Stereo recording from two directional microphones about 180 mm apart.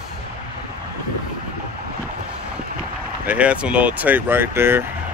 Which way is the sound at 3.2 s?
5° right (ahead or behind).